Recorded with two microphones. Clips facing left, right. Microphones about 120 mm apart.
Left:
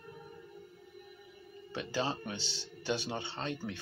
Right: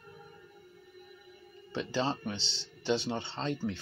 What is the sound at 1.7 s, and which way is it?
Speech, 25° right (ahead or behind).